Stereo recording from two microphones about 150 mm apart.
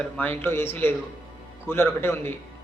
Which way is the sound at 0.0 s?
10° left (ahead or behind).